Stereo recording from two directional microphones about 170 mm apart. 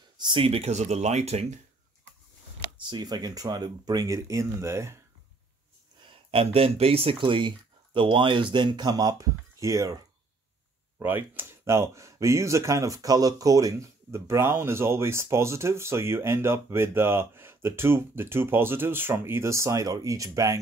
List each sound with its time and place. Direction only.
0.2 s speech: 30° right (ahead or behind)
2.9 s speech: 25° right (ahead or behind)
6.3 s speech: 35° right (ahead or behind)
11.0 s speech: 10° right (ahead or behind)